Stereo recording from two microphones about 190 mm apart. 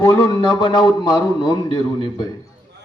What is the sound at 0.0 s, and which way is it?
A man's voice, 20° left (ahead or behind).